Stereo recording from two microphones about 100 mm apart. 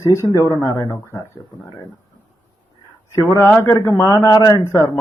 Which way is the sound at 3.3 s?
25° left (ahead or behind).